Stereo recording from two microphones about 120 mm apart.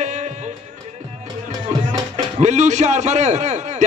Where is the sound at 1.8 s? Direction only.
80° right.